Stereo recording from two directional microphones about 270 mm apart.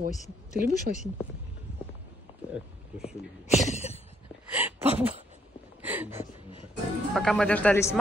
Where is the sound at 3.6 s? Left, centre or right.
Left.